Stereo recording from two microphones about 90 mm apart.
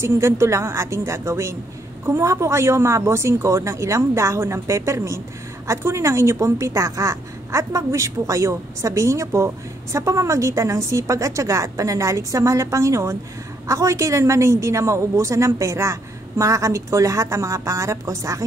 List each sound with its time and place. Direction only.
0.0 s a woman's voice: 30° right (ahead or behind)